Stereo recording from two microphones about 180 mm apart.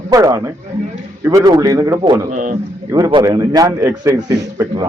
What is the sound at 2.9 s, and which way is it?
A man's voice, 25° right (ahead or behind).